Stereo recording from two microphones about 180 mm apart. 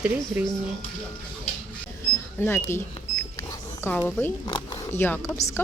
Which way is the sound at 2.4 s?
15° left (ahead or behind).